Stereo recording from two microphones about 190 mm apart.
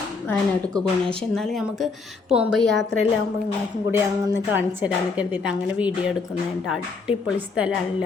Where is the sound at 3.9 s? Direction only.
10° right (ahead or behind).